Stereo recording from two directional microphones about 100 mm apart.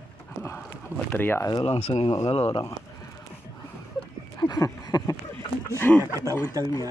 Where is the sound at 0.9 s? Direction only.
20° left (ahead or behind).